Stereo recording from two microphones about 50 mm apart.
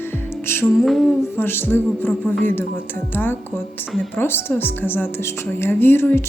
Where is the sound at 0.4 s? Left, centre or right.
Left.